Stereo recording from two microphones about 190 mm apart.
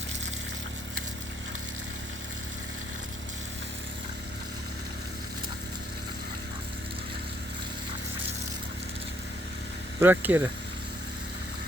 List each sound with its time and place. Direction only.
10.0 s speech: 10° right (ahead or behind)